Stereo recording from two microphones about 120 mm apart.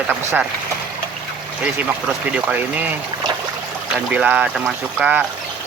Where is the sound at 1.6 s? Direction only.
10° right (ahead or behind).